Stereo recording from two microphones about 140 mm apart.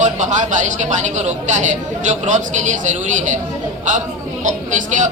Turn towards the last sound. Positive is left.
turn(degrees=-60)  # may be behind; listen again after turning